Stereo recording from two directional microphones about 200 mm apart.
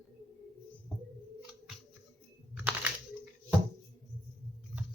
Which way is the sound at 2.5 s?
10° right (ahead or behind).